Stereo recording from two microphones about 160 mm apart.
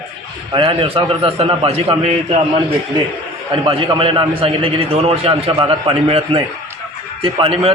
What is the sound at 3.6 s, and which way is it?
A man's voice, 30° right (ahead or behind).